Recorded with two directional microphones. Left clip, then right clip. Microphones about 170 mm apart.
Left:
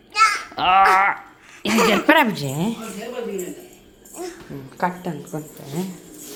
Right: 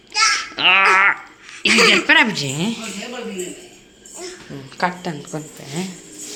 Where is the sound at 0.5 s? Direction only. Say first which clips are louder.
Right 3 dB; 25° left (ahead or behind).